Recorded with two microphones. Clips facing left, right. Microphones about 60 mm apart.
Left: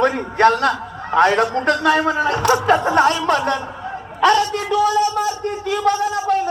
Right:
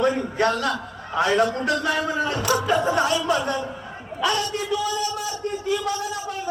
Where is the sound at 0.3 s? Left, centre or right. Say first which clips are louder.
Left 7 dB; left.